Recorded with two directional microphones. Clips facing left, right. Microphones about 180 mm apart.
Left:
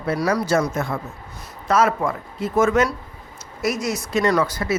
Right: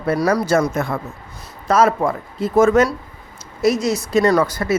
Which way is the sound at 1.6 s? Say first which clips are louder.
Right 3 dB; 35° right (ahead or behind).